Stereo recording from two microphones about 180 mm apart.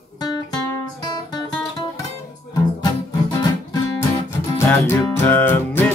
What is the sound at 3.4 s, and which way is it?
Guitar, 20° left (ahead or behind).